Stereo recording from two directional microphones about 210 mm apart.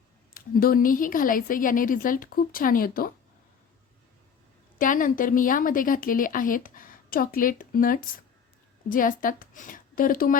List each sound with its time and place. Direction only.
0.3 s a woman's voice: 45° left (ahead or behind)
4.8 s a woman's voice: 40° left (ahead or behind)